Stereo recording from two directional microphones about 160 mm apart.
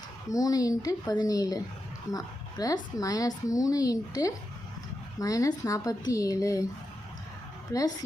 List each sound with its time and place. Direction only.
0.3 s speech: 20° left (ahead or behind)
7.7 s speech: 20° left (ahead or behind)